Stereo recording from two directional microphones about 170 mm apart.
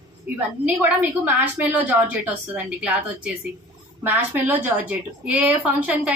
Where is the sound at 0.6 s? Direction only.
10° right (ahead or behind).